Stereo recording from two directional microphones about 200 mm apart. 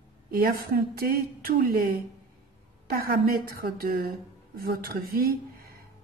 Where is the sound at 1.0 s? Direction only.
45° right (ahead or behind).